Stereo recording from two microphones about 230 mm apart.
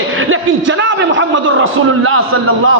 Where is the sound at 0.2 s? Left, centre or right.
Right.